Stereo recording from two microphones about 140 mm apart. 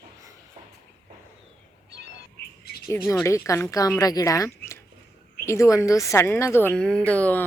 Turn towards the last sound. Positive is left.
turn(degrees=10)  # may be behind; listen again after turning